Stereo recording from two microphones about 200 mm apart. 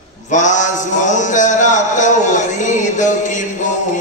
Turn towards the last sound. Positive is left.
turn(degrees=40)  # may be behind; listen again after turning